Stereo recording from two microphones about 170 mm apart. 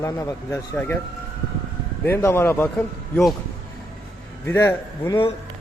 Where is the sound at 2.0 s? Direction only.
15° left (ahead or behind).